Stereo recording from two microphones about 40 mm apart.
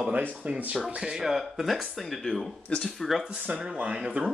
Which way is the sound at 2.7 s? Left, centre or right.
Left.